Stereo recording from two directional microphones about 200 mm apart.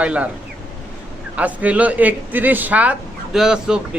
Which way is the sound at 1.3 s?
5° right (ahead or behind).